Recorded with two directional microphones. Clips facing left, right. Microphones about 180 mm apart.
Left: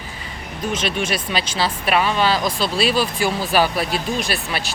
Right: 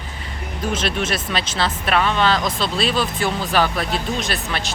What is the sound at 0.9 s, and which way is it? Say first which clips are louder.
Speech: even; centre (ahead or behind).